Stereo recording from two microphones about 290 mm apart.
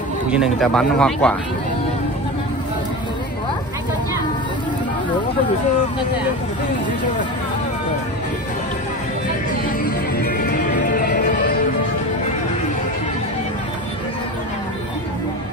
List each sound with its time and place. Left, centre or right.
0.3 s speech: centre
9.8 s music: left